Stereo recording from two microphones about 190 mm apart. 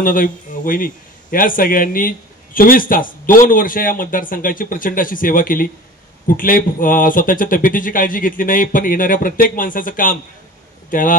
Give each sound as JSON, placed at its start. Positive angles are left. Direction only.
{"t": 0.0, "sound": "speech", "side_deg": 45}